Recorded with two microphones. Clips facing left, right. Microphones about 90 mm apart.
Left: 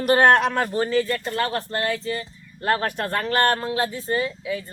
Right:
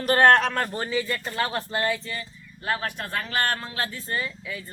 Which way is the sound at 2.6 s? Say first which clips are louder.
Left 6 dB; 55° left (ahead or behind).